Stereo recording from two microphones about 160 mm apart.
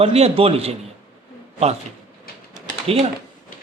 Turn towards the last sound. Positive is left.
turn(degrees=-40)  # may be behind; listen again after turning